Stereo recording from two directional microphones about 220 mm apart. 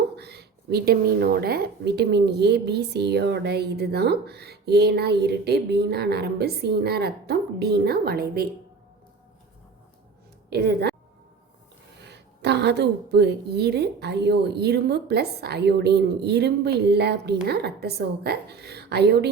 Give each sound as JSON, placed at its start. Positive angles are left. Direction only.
{"t": 0.2, "sound": "speech", "side_deg": -50}
{"t": 10.5, "sound": "speech", "side_deg": -50}
{"t": 11.9, "sound": "speech", "side_deg": -50}